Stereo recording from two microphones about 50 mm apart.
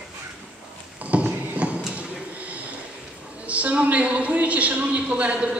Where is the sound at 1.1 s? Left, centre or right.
Right.